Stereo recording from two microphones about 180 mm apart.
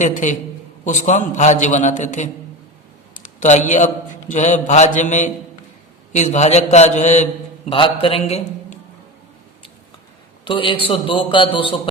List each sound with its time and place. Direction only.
0.0 s a man's voice: 45° left (ahead or behind)
7.7 s a man's voice: 30° left (ahead or behind)
10.4 s a man's voice: 30° left (ahead or behind)